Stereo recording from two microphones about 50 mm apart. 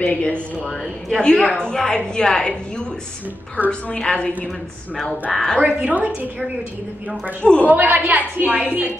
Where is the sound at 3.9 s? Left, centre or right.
Centre.